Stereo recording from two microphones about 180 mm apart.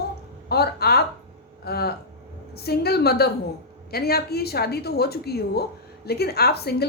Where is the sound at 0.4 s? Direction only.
60° left (ahead or behind).